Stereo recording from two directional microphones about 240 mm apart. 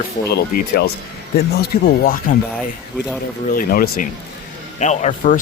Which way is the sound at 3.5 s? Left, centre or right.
Left.